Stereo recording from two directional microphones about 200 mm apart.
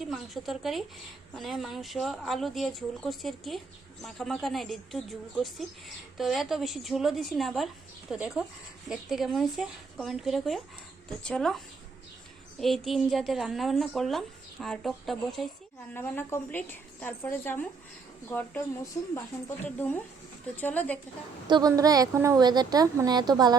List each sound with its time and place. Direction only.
0.0 s a woman's voice: centre (ahead or behind)
21.4 s a woman's voice: 20° right (ahead or behind)